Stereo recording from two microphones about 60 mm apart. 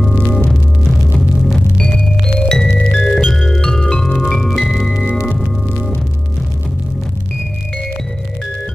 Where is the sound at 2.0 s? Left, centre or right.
Centre.